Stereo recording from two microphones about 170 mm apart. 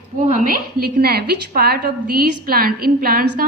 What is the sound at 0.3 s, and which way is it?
A woman's voice, 55° right (ahead or behind).